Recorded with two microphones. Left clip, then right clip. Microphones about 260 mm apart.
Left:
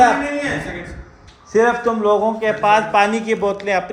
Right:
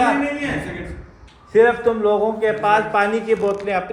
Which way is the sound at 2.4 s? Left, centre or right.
Left.